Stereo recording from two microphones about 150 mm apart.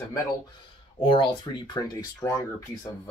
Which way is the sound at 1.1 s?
30° left (ahead or behind).